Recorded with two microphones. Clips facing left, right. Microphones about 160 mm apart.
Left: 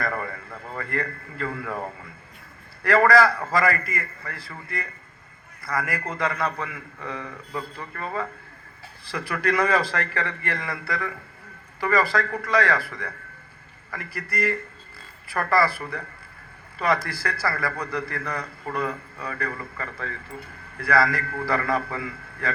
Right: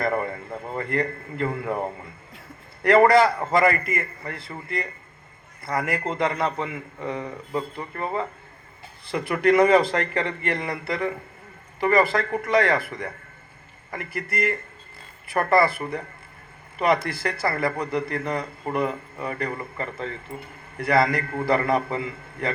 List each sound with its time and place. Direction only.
0.0 s a man's voice: 25° right (ahead or behind)